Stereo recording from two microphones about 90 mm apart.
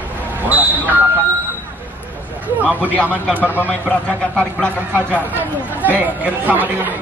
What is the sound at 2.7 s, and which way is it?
Speech, 15° left (ahead or behind).